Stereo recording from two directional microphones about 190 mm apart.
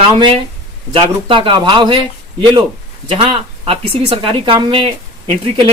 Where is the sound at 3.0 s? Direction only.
30° right (ahead or behind).